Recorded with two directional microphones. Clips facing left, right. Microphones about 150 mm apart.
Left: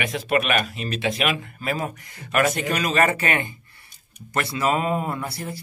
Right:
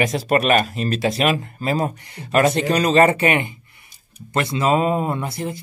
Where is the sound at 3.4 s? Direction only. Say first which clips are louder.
Right 3 dB; 15° right (ahead or behind).